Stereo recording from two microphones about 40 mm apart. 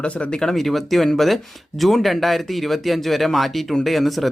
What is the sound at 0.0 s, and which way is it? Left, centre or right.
Speech, left.